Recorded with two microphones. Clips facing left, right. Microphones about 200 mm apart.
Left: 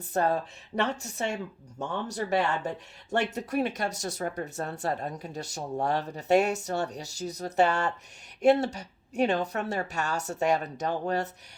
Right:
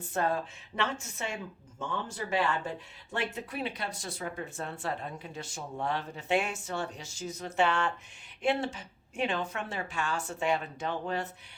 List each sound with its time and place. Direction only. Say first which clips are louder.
0.0 s speech: left 4 dB; 40° left (ahead or behind)